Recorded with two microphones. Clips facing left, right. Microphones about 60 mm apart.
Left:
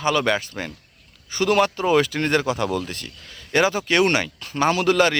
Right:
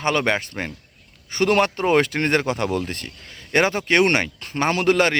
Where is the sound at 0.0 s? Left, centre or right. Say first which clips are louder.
Even; right.